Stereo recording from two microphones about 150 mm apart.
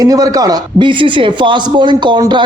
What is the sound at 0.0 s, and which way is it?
A man's voice, 25° right (ahead or behind).